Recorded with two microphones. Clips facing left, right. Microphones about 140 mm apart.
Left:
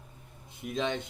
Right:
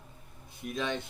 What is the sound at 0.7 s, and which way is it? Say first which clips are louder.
Speech: left 2 dB; 20° left (ahead or behind).